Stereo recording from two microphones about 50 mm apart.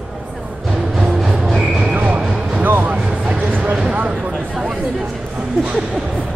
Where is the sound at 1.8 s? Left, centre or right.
Right.